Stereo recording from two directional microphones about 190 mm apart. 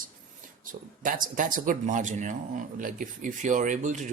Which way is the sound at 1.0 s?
45° right (ahead or behind).